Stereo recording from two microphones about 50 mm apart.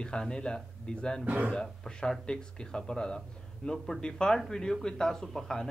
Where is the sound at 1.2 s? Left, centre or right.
Right.